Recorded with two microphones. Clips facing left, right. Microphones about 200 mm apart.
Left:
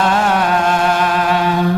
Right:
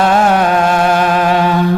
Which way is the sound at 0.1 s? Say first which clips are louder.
Right 4 dB; 45° right (ahead or behind).